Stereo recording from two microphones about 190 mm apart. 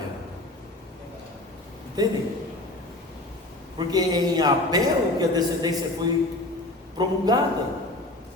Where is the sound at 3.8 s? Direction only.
20° right (ahead or behind).